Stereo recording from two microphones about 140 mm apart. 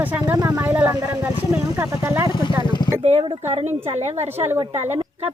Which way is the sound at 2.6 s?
30° left (ahead or behind).